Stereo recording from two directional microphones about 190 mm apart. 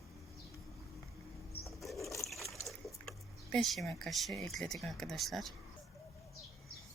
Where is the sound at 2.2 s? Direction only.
Centre (ahead or behind).